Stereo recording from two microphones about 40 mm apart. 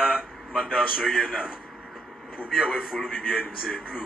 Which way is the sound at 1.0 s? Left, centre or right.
Centre.